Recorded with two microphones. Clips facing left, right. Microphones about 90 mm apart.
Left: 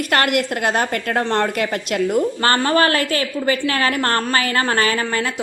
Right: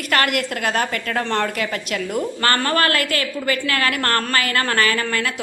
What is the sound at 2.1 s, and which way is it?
A woman's voice, 20° left (ahead or behind).